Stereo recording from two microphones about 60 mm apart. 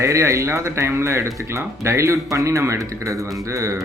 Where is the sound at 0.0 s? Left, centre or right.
Right.